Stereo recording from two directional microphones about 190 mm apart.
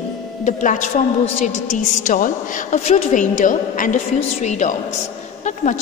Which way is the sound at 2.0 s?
40° left (ahead or behind).